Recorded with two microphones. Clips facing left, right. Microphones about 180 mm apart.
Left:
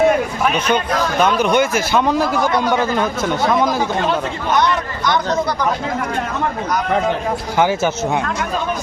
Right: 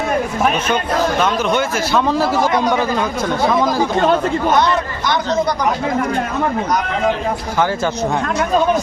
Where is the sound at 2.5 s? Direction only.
15° right (ahead or behind).